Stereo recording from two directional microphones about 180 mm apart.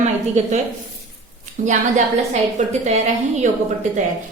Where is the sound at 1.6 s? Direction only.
45° right (ahead or behind).